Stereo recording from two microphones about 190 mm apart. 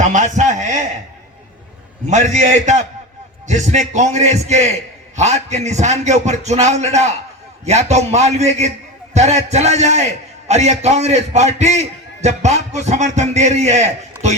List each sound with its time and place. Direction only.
0.0 s a man's voice: 40° right (ahead or behind)
2.0 s a man's voice: 40° right (ahead or behind)